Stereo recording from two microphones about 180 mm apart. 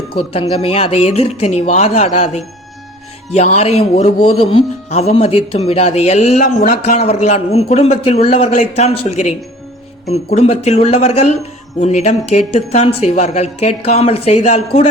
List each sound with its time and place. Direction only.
0.1 s speech: 35° left (ahead or behind)
10.3 s speech: 35° left (ahead or behind)